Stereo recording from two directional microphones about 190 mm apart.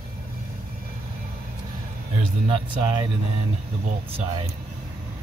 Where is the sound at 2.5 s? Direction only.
25° right (ahead or behind).